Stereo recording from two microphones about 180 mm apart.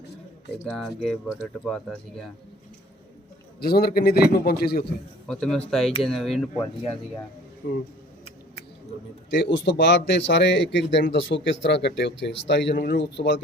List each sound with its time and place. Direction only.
0.6 s speech: centre (ahead or behind)
3.6 s a man's voice: 60° left (ahead or behind)
5.3 s speech: 5° left (ahead or behind)
7.6 s a man's voice: 60° left (ahead or behind)
9.3 s speech: 70° left (ahead or behind)